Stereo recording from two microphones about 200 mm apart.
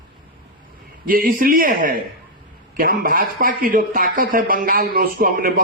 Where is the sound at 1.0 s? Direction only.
45° right (ahead or behind).